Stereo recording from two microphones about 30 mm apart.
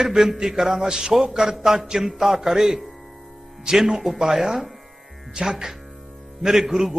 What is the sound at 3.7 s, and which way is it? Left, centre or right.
Speech, right.